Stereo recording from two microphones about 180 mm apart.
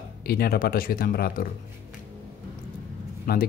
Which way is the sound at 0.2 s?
60° left (ahead or behind).